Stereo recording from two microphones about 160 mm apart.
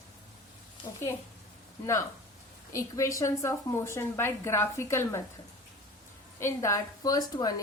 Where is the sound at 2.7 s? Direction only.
20° left (ahead or behind).